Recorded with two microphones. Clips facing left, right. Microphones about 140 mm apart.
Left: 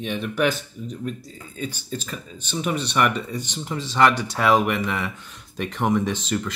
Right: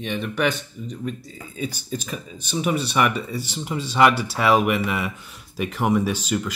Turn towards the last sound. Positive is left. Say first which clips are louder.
# right 1 dB
turn(degrees=-10)  # may be behind; listen again after turning